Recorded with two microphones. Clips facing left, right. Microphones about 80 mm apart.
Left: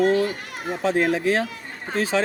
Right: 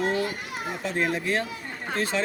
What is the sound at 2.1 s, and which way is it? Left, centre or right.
Speech, left.